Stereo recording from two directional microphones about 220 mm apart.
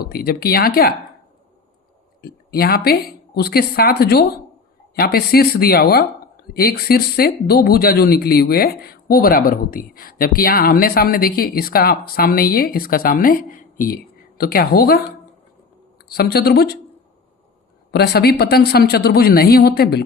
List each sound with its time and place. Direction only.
0.0 s speech: 45° left (ahead or behind)
2.2 s speech: 45° left (ahead or behind)
16.1 s speech: 45° left (ahead or behind)
17.9 s speech: 45° left (ahead or behind)